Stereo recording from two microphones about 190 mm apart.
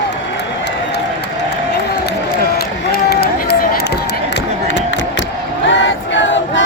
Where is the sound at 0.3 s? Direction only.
60° left (ahead or behind).